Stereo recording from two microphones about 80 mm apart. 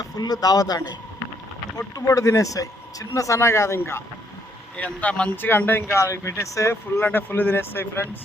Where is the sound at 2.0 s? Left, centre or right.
Left.